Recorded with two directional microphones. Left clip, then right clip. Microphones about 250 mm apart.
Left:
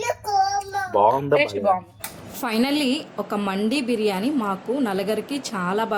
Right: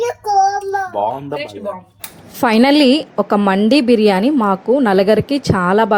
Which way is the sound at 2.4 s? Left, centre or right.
Right.